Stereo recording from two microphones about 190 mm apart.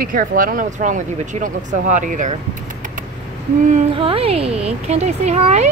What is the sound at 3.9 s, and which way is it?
Speech, 30° right (ahead or behind).